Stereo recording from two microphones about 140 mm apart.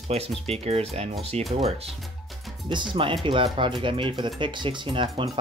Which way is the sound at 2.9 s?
40° right (ahead or behind).